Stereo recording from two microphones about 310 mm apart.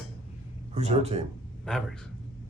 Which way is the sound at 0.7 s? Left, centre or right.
Right.